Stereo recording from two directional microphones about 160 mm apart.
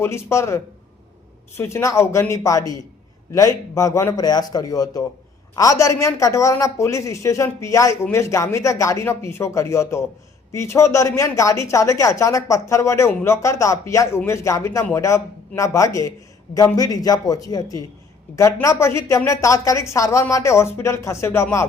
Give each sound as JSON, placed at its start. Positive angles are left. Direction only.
{"t": 0.0, "sound": "a woman's voice", "side_deg": 15}